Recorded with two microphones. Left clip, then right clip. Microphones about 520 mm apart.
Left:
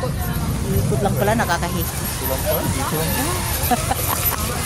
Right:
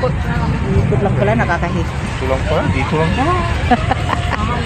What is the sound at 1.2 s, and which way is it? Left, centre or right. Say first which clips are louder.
Speech: right 3 dB; left.